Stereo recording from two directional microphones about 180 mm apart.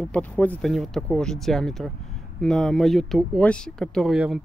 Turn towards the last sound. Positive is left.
turn(degrees=0)  # may be behind; listen again after turning